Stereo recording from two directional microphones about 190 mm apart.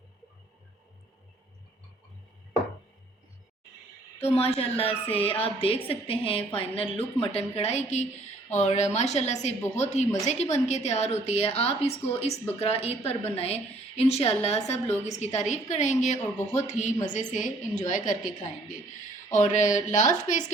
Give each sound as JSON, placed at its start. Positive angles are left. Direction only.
{"t": 4.2, "sound": "a woman's voice", "side_deg": 30}